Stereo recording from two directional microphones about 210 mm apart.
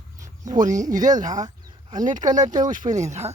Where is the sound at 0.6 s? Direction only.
35° right (ahead or behind).